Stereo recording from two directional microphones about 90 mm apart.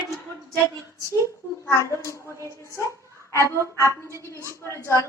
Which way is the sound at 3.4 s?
35° right (ahead or behind).